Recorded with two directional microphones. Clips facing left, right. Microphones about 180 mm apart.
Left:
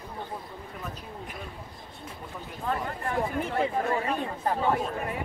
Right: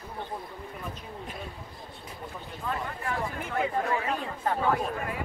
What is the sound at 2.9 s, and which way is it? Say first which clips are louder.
Speech: left 3 dB; 35° left (ahead or behind).